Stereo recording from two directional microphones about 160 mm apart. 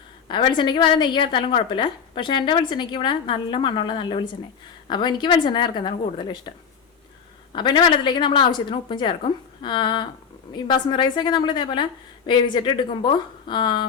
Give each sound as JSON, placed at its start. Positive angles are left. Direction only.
{"t": 0.3, "sound": "a woman's voice", "side_deg": 30}
{"t": 7.5, "sound": "a woman's voice", "side_deg": 30}